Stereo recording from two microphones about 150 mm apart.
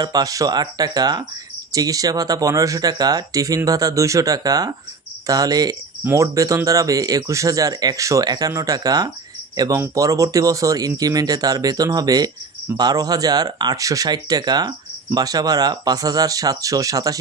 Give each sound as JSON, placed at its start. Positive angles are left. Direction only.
{"t": 0.0, "sound": "speech", "side_deg": -25}